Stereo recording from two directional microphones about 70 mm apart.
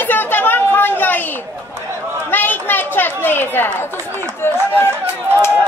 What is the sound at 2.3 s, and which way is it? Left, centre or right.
Chatter, left.